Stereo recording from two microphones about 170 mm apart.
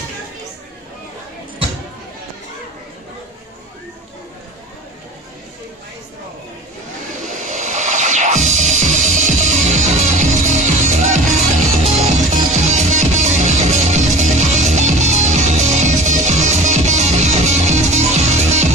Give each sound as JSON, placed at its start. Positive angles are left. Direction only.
{"t": 7.2, "sound": "music", "side_deg": -45}